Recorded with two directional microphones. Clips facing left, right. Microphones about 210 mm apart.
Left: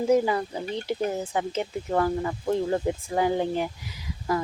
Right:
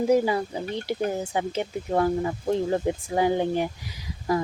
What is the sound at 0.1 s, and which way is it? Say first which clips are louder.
Speech: left 2 dB; 15° right (ahead or behind).